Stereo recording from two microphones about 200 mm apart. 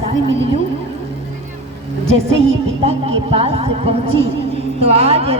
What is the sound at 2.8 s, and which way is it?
A woman's voice, 30° right (ahead or behind).